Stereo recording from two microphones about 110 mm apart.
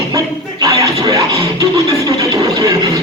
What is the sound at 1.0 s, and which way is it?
Music, 30° right (ahead or behind).